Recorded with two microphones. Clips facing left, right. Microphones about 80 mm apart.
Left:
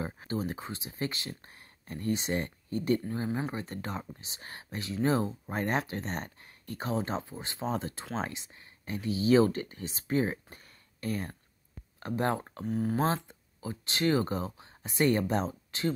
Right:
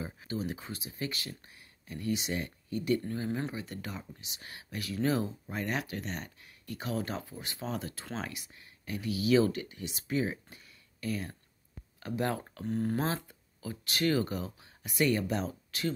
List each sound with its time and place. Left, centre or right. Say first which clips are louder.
0.0 s speech: left 3 dB; left
1.4 s speech: left 3 dB; left
3.3 s speech: left 1 dB; centre
3.5 s speech: left 3 dB; left
12.6 s speech: left 1 dB; centre
13.0 s speech: left 4 dB; left